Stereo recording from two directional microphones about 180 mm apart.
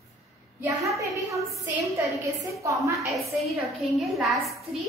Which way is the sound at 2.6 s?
15° right (ahead or behind).